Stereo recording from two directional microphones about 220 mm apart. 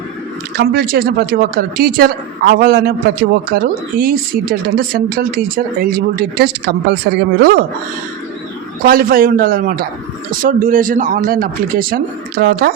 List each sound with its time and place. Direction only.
0.5 s speech: 45° right (ahead or behind)
8.8 s speech: 40° right (ahead or behind)